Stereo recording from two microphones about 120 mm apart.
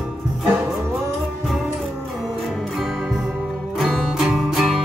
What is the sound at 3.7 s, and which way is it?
Music, centre (ahead or behind).